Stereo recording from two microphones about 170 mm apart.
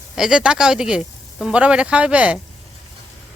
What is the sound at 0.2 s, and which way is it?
Speech, 5° right (ahead or behind).